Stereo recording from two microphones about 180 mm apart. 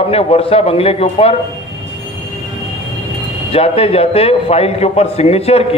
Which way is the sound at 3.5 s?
30° left (ahead or behind).